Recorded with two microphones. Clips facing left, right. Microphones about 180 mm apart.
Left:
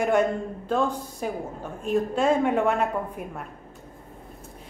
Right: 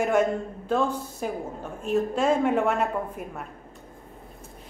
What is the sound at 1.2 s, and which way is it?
A woman's voice, centre (ahead or behind).